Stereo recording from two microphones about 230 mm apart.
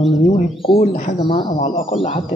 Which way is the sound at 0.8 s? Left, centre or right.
Left.